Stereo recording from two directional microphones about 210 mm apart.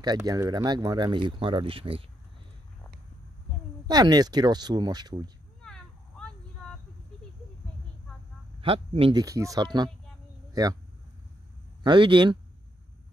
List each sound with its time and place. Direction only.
0.0 s speech: 20° right (ahead or behind)
3.8 s speech: 20° right (ahead or behind)
5.6 s a sound: 5° left (ahead or behind)
8.5 s speech: 25° right (ahead or behind)
11.8 s speech: 25° right (ahead or behind)